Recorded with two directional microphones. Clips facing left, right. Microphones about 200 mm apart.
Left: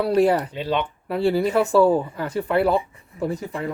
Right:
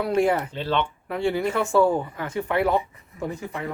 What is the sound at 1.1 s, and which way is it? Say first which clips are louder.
Speech: left 4 dB; 35° left (ahead or behind).